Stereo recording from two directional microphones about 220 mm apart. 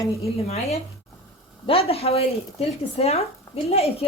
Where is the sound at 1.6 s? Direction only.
25° left (ahead or behind).